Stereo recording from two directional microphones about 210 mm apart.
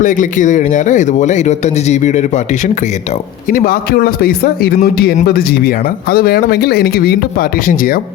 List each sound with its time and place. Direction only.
0.0 s speech: 40° left (ahead or behind)
3.5 s a man's voice: 40° left (ahead or behind)